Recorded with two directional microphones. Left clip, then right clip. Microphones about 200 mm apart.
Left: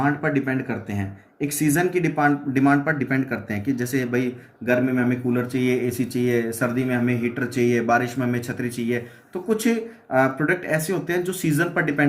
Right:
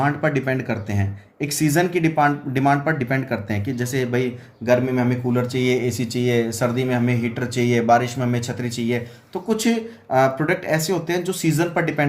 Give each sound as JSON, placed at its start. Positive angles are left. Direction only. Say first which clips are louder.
{"t": 0.0, "sound": "speech", "louder": "right 2 dB", "side_deg": -60}